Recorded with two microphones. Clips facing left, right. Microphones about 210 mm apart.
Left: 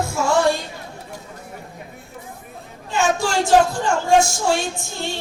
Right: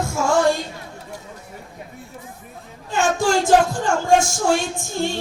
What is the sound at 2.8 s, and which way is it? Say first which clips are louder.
A woman's voice: right 1 dB; 50° right (ahead or behind).